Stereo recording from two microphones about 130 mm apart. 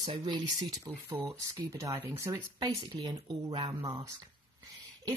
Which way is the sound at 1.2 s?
25° right (ahead or behind).